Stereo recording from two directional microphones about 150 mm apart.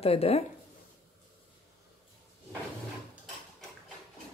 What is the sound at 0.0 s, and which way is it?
Speech, 40° left (ahead or behind).